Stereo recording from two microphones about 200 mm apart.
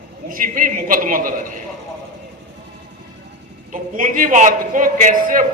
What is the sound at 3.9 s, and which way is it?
Speech, 40° right (ahead or behind).